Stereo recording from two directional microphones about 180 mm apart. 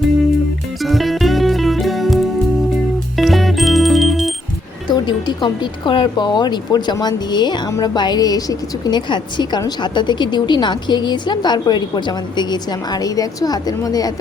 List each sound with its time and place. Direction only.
0.8 s music: centre (ahead or behind)
4.9 s speech: 25° left (ahead or behind)